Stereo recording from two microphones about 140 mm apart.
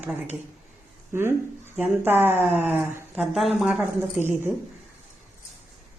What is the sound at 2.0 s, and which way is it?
Speech, 15° right (ahead or behind).